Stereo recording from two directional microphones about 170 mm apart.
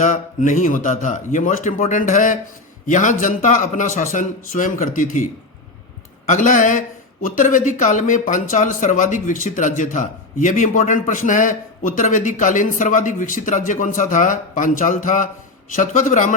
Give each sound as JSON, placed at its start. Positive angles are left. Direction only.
{"t": 0.0, "sound": "speech", "side_deg": 45}